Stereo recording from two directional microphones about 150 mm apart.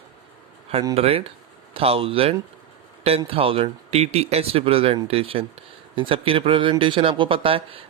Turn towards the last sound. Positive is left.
turn(degrees=-35)  # may be behind; listen again after turning